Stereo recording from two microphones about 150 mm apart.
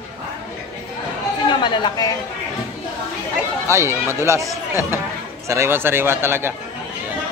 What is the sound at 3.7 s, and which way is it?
Speech, 15° right (ahead or behind).